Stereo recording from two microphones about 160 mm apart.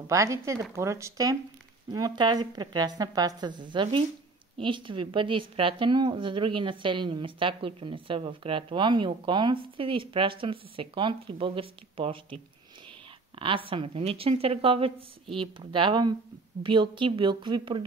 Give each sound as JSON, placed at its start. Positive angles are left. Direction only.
{"t": 0.1, "sound": "a woman's voice", "side_deg": -20}
{"t": 13.4, "sound": "a woman's voice", "side_deg": -35}